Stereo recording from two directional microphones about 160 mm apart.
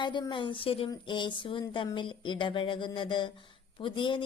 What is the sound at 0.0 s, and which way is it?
A woman's voice, 30° left (ahead or behind).